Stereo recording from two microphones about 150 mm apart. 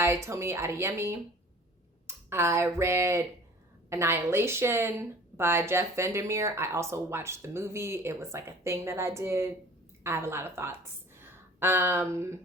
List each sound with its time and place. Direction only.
0.0 s a woman's voice: 20° right (ahead or behind)